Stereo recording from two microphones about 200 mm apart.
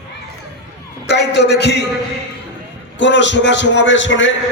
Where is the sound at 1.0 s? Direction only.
60° left (ahead or behind).